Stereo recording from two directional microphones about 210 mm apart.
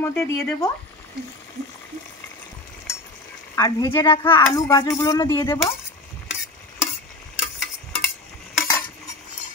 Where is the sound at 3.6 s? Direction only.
15° left (ahead or behind).